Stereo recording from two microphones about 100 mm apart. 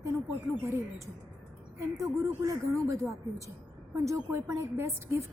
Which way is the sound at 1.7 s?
30° right (ahead or behind).